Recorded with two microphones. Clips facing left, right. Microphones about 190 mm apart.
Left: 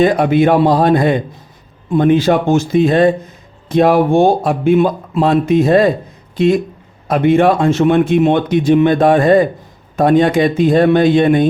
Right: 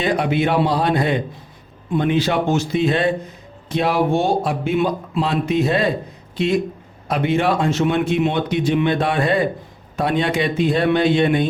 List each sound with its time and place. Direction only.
0.0 s speech: 45° left (ahead or behind)